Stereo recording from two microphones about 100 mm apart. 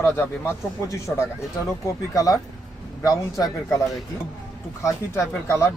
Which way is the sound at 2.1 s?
35° left (ahead or behind).